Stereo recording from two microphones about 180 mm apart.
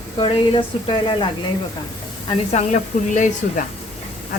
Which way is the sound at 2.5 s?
40° left (ahead or behind).